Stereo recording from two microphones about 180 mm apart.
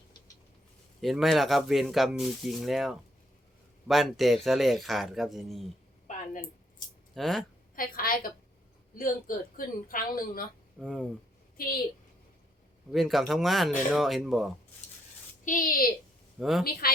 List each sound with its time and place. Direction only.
1.0 s speech: centre (ahead or behind)
6.1 s a sound: 45° left (ahead or behind)
7.1 s speech: centre (ahead or behind)
7.8 s a woman's voice: 55° left (ahead or behind)
10.8 s speech: 5° left (ahead or behind)
11.5 s a woman's voice: 55° left (ahead or behind)
12.9 s speech: centre (ahead or behind)
15.4 s a woman's voice: 50° left (ahead or behind)
16.4 s speech: centre (ahead or behind)